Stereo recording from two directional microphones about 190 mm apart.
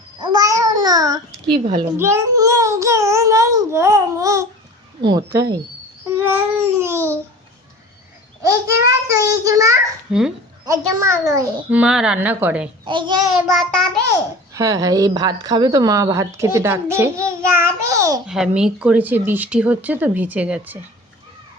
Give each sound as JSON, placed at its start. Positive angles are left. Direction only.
{"t": 0.2, "sound": "babbling", "side_deg": -20}
{"t": 2.0, "sound": "a woman's voice", "side_deg": -15}
{"t": 6.1, "sound": "a sound", "side_deg": -10}
{"t": 8.4, "sound": "a woman's voice", "side_deg": -15}
{"t": 10.1, "sound": "speech", "side_deg": -5}
{"t": 10.7, "sound": "a woman's voice", "side_deg": -15}
{"t": 12.8, "sound": "a child's voice", "side_deg": -25}
{"t": 13.5, "sound": "child singing", "side_deg": 0}
{"t": 14.5, "sound": "a woman's voice", "side_deg": -15}
{"t": 18.3, "sound": "a woman's voice", "side_deg": -5}